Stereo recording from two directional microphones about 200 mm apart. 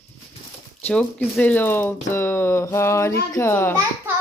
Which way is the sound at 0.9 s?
5° left (ahead or behind).